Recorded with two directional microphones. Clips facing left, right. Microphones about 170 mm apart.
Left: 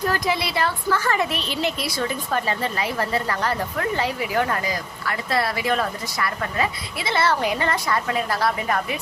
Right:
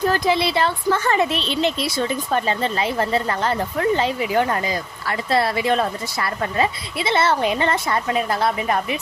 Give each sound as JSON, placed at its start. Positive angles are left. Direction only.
{"t": 0.1, "sound": "a woman's voice", "side_deg": -25}